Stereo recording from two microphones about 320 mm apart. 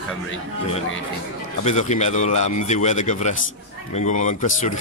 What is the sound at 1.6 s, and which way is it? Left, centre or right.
Speech, left.